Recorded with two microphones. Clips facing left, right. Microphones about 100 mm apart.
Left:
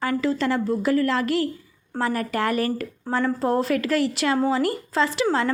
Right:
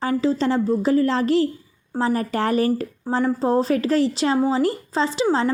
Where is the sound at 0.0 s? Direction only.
25° right (ahead or behind).